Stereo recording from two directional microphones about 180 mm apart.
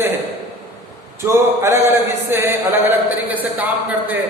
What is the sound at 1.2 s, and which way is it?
Speech, 15° right (ahead or behind).